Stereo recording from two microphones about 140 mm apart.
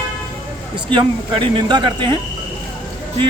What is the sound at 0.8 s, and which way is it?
Speech, 35° right (ahead or behind).